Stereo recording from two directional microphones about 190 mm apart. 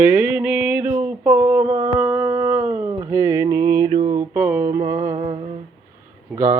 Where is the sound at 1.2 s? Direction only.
10° right (ahead or behind).